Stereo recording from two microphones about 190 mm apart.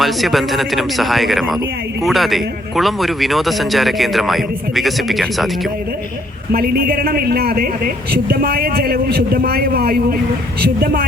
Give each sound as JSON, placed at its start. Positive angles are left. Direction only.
{"t": 0.0, "sound": "a man's voice", "side_deg": 0}
{"t": 6.5, "sound": "a man's voice", "side_deg": -50}